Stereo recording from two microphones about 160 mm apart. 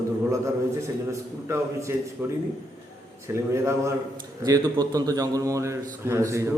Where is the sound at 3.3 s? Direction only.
15° right (ahead or behind).